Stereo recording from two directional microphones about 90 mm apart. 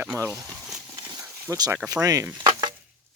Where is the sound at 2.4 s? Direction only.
50° right (ahead or behind).